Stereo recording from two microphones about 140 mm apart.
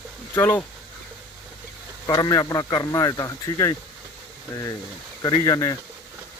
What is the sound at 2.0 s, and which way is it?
Speech, 25° left (ahead or behind).